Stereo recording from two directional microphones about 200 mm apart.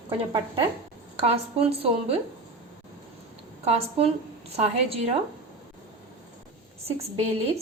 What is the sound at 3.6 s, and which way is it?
Speech, 30° right (ahead or behind).